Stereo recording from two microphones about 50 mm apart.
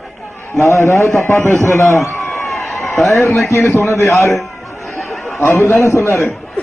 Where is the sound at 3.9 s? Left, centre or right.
Left.